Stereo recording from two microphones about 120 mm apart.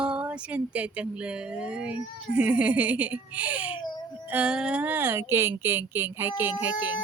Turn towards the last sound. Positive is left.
turn(degrees=-15)  # may be behind; listen again after turning